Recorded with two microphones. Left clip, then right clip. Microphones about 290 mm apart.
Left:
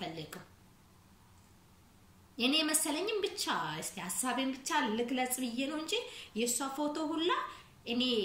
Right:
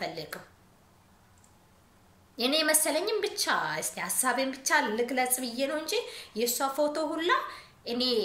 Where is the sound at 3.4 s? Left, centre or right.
Centre.